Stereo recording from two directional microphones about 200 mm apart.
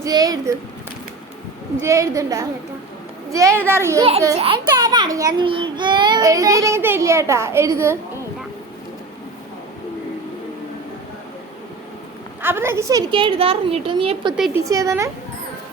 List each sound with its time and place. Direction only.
0.0 s a child's voice: 20° right (ahead or behind)
1.8 s a child's voice: 15° right (ahead or behind)
4.4 s a child's voice: 25° right (ahead or behind)
12.4 s a woman's voice: 10° right (ahead or behind)